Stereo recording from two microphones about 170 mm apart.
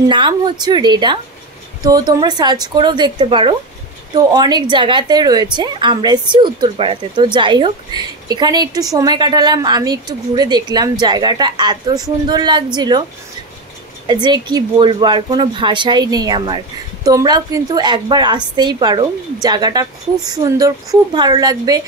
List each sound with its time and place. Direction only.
0.1 s speech: 25° right (ahead or behind)
14.0 s speech: 25° right (ahead or behind)